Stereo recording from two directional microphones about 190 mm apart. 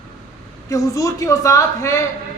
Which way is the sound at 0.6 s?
15° left (ahead or behind).